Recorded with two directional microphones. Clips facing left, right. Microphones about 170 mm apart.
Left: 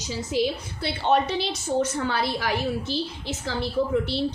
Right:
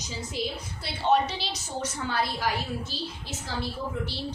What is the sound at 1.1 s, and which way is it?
A woman's voice, 55° left (ahead or behind).